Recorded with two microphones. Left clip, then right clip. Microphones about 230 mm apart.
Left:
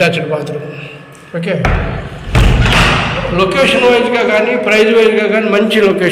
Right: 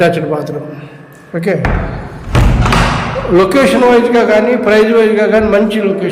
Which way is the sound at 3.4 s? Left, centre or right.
Right.